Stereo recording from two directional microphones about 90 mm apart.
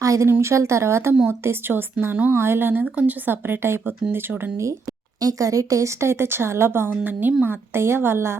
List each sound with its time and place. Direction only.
0.0 s a sound: 40° right (ahead or behind)
0.3 s a woman's voice: 30° right (ahead or behind)
5.2 s a woman's voice: 40° right (ahead or behind)